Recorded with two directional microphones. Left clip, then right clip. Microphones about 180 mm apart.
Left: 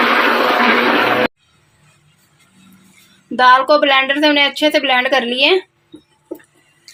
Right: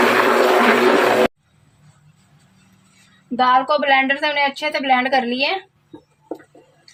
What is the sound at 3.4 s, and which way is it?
Speech, 45° left (ahead or behind).